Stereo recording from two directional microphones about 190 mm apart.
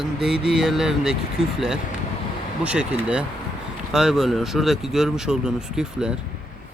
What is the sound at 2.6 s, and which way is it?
Speech, 5° right (ahead or behind).